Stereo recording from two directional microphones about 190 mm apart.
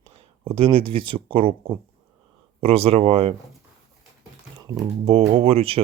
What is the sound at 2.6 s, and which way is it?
Speech, 30° right (ahead or behind).